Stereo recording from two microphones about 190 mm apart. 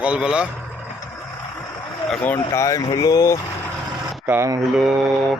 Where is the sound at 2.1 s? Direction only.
10° left (ahead or behind).